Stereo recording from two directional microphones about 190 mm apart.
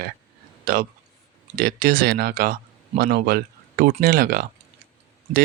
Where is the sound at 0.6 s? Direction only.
50° right (ahead or behind).